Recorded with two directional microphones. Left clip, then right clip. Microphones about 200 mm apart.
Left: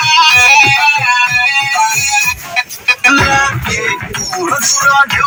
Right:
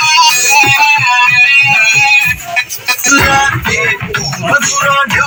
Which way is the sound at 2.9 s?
20° right (ahead or behind).